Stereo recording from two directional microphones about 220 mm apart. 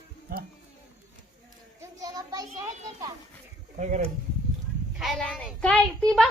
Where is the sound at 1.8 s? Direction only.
15° right (ahead or behind).